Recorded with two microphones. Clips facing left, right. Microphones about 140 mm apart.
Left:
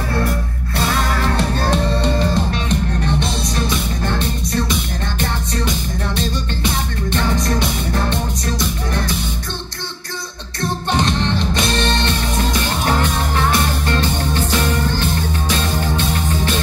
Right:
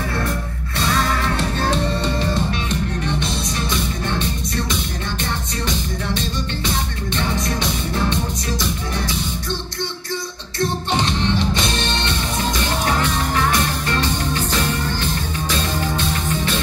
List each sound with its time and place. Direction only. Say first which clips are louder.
2.0 s music: left 3 dB; 50° left (ahead or behind)
7.2 s music: left 3 dB; 50° left (ahead or behind)
11.1 s music: left 1 dB; 45° left (ahead or behind)